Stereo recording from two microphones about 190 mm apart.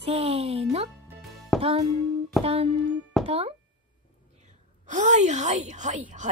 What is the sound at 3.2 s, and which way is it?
Speech, 30° right (ahead or behind).